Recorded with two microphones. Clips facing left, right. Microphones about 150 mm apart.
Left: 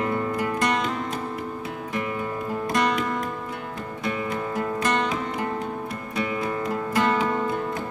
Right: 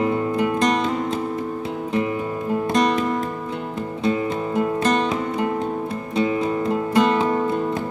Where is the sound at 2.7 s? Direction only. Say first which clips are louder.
Right 4 dB; 25° right (ahead or behind).